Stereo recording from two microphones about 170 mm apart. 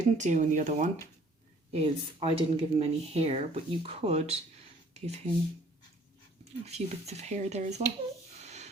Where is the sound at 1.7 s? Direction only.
35° right (ahead or behind).